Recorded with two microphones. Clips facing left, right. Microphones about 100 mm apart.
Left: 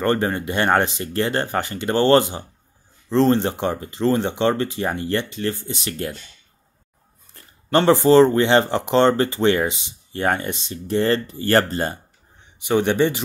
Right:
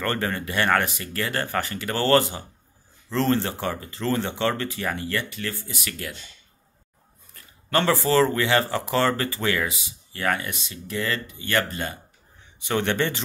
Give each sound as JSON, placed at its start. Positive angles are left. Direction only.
{"t": 0.0, "sound": "speech", "side_deg": 20}
{"t": 7.3, "sound": "speech", "side_deg": 25}
{"t": 12.6, "sound": "speech", "side_deg": 15}